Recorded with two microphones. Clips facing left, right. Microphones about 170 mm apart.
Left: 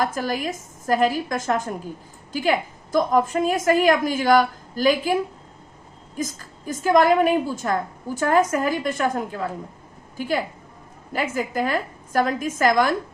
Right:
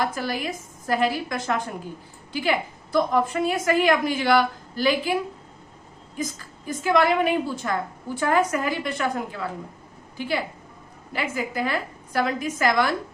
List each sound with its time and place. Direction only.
0.0 s a woman's voice: 45° left (ahead or behind)
6.1 s a woman's voice: 45° left (ahead or behind)
11.1 s a woman's voice: 45° left (ahead or behind)